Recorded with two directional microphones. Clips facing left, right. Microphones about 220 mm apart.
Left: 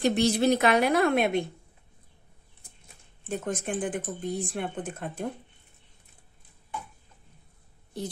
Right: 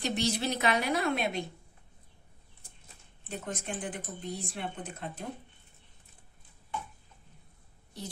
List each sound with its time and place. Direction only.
0.0 s a woman's voice: 50° left (ahead or behind)
3.3 s speech: 50° left (ahead or behind)